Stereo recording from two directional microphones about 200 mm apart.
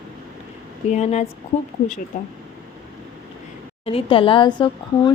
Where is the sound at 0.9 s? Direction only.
35° left (ahead or behind).